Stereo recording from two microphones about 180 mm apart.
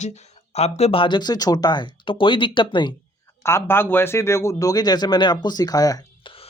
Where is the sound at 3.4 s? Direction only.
15° left (ahead or behind).